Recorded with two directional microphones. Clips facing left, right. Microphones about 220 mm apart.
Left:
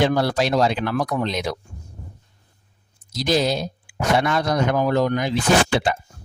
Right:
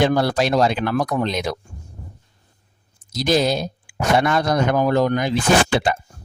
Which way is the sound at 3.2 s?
50° right (ahead or behind).